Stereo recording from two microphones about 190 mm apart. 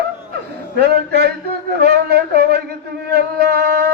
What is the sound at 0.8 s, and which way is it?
Speech, 60° right (ahead or behind).